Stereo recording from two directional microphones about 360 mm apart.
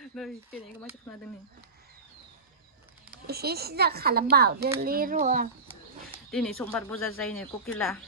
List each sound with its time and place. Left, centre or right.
0.0 s speech: centre
3.2 s a woman's voice: right
6.3 s speech: centre